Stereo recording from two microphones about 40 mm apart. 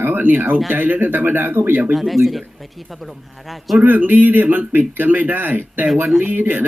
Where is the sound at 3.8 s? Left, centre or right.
Right.